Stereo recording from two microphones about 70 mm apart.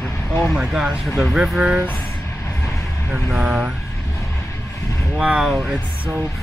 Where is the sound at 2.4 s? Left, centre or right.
Left.